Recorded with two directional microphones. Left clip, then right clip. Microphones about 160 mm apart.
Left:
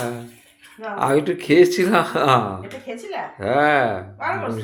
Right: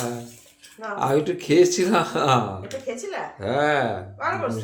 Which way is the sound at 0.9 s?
15° left (ahead or behind).